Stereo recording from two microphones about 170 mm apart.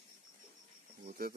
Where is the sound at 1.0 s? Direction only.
50° right (ahead or behind).